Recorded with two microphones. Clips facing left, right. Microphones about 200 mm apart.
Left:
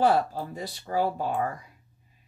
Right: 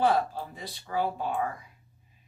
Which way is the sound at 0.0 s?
40° left (ahead or behind).